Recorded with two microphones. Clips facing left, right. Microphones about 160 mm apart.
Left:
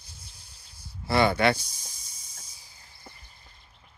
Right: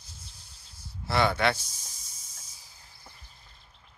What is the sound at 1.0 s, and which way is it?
Speech, centre (ahead or behind).